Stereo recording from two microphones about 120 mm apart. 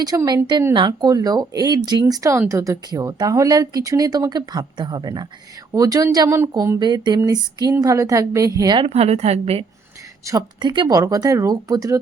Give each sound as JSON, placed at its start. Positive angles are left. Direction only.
{"t": 0.1, "sound": "a woman's voice", "side_deg": -25}
{"t": 0.7, "sound": "a woman's voice", "side_deg": -35}
{"t": 8.9, "sound": "a woman's voice", "side_deg": -65}
{"t": 10.2, "sound": "speech", "side_deg": -35}